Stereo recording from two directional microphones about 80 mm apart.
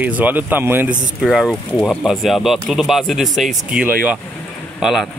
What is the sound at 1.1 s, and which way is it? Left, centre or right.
Speech, centre.